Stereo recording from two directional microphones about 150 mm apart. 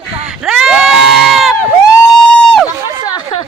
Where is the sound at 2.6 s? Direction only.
30° left (ahead or behind).